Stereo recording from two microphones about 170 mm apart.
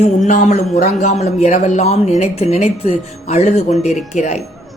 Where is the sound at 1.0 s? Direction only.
40° left (ahead or behind).